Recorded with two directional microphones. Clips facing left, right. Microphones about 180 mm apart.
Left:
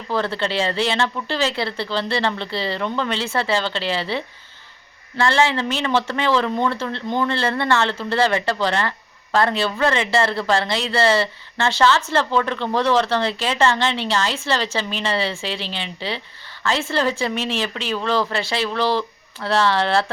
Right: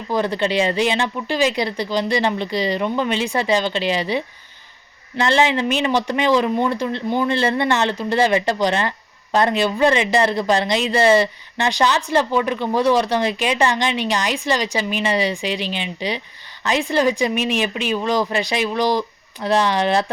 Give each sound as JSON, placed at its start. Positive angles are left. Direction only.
{"t": 0.1, "sound": "speech", "side_deg": -15}